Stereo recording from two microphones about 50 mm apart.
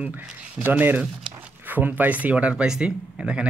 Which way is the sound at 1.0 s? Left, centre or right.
Centre.